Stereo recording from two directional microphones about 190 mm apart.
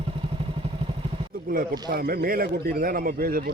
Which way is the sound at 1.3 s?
50° right (ahead or behind).